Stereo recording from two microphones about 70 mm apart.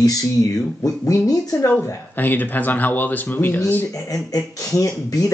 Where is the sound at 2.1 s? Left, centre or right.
Left.